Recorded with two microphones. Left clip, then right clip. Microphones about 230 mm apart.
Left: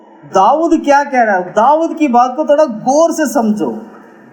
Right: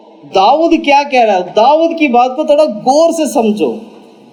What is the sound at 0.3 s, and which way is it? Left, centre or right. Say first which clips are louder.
Speech: right 1 dB; left.